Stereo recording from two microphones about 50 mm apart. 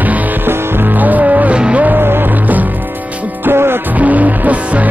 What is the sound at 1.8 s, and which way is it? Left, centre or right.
Music, right.